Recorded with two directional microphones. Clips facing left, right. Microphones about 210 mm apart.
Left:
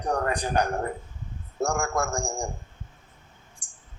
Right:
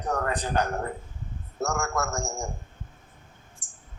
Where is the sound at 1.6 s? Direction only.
30° left (ahead or behind).